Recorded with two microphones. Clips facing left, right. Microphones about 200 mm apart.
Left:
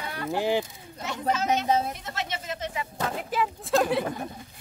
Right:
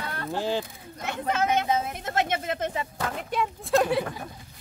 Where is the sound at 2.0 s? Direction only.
50° right (ahead or behind).